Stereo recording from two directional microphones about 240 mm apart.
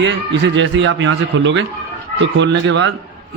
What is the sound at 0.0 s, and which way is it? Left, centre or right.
A man's voice, right.